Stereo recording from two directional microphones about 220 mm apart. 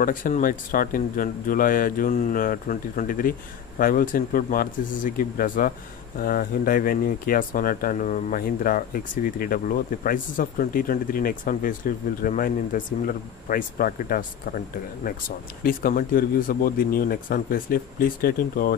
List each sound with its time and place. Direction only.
0.0 s speech: 40° left (ahead or behind)